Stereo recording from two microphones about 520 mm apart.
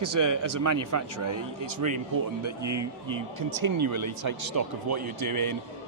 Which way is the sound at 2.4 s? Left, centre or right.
Right.